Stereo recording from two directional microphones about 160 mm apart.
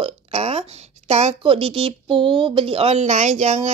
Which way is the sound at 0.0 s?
40° right (ahead or behind).